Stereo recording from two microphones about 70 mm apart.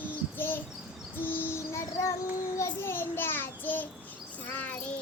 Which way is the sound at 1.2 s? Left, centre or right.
Left.